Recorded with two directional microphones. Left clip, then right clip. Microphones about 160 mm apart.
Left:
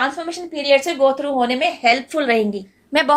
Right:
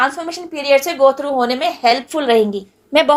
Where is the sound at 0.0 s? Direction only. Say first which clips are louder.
Right 4 dB; 30° right (ahead or behind).